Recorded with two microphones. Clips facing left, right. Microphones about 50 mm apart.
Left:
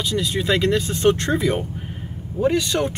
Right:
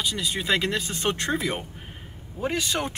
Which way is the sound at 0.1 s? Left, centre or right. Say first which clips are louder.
Left 5 dB; centre.